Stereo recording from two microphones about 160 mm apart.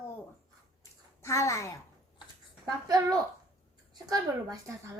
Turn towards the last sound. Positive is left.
turn(degrees=-20)  # may be behind; listen again after turning